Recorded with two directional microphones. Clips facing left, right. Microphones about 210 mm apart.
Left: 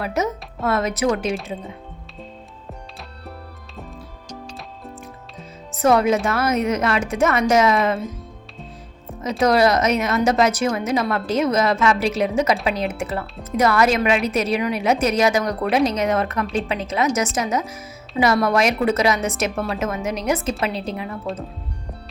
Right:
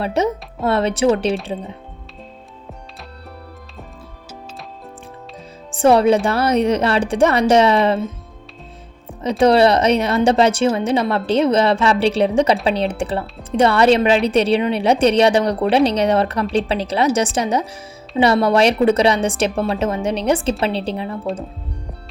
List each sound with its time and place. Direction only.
0.0 s a woman's voice: 30° right (ahead or behind)
5.7 s a woman's voice: 30° right (ahead or behind)
9.4 s a woman's voice: 30° right (ahead or behind)